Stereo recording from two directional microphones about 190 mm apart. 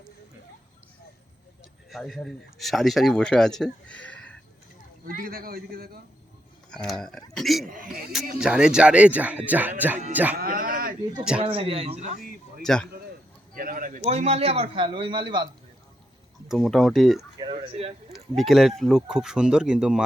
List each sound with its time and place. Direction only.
1.9 s speech: centre (ahead or behind)
5.2 s a man's voice: 50° right (ahead or behind)
6.7 s speech: 5° left (ahead or behind)
7.7 s a man's voice: 45° right (ahead or behind)
8.4 s speech: 5° right (ahead or behind)
10.3 s speech: 50° right (ahead or behind)
11.4 s a man's voice: 30° right (ahead or behind); by 12.6 s 45° right (ahead or behind)
12.6 s speech: 5° left (ahead or behind)
13.5 s a sound: 45° right (ahead or behind)
14.0 s a man's voice: 35° right (ahead or behind)
16.5 s speech: centre (ahead or behind)
17.2 s speech: 20° right (ahead or behind)
17.5 s speech: 30° right (ahead or behind)
18.1 s speech: centre (ahead or behind)